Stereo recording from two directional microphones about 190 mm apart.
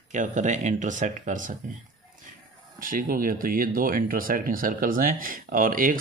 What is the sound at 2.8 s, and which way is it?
Speech, 45° right (ahead or behind).